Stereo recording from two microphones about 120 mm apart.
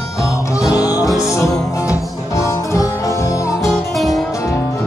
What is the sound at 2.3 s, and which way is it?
Music, 25° left (ahead or behind).